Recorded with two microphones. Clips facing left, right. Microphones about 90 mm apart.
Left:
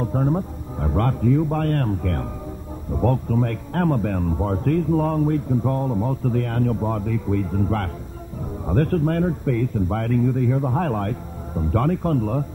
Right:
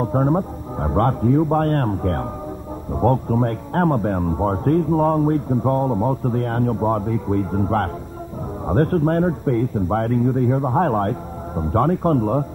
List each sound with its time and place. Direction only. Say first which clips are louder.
0.0 s a man's voice: right 4 dB; 35° right (ahead or behind)